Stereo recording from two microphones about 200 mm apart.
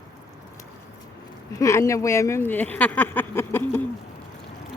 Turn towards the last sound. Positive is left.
turn(degrees=10)  # may be behind; listen again after turning